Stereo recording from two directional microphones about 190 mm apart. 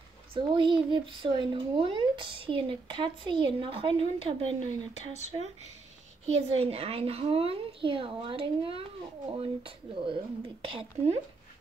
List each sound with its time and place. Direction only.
0.3 s speech: 25° right (ahead or behind)